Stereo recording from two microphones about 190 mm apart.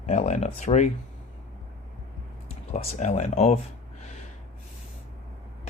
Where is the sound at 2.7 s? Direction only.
40° left (ahead or behind).